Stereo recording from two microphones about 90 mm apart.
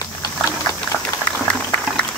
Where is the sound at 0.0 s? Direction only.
40° left (ahead or behind).